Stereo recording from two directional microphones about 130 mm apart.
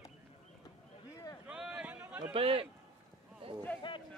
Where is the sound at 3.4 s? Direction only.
45° right (ahead or behind).